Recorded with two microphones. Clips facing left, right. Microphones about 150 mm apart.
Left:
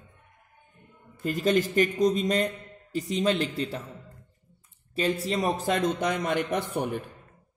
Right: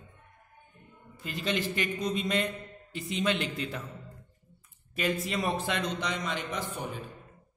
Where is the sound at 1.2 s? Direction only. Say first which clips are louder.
Left 8 dB; 45° left (ahead or behind).